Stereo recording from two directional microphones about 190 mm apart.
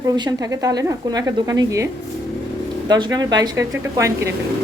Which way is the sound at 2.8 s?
25° right (ahead or behind).